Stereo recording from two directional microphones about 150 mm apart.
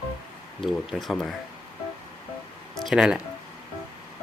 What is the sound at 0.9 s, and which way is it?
Speech, centre (ahead or behind).